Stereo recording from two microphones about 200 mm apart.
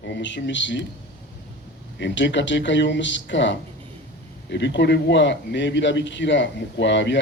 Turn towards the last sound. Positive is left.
turn(degrees=60)  # may be behind; listen again after turning